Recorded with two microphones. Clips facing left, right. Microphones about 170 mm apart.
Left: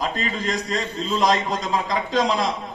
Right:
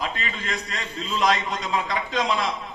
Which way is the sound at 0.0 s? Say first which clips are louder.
Left 5 dB; 40° left (ahead or behind).